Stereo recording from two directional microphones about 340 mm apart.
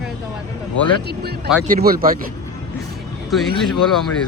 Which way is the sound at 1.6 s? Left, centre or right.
Right.